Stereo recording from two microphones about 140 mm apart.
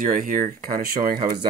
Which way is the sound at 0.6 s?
90° right.